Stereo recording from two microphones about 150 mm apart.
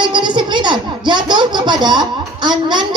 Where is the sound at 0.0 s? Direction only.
30° right (ahead or behind).